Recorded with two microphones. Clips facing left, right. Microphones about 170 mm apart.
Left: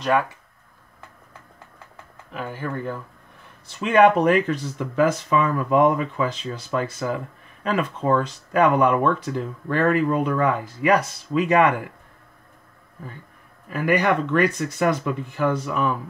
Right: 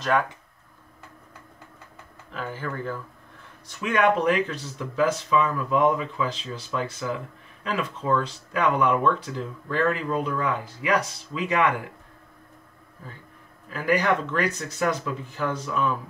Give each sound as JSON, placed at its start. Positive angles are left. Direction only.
{"t": 2.3, "sound": "speech", "side_deg": 15}
{"t": 4.2, "sound": "speech", "side_deg": 55}
{"t": 13.7, "sound": "speech", "side_deg": 60}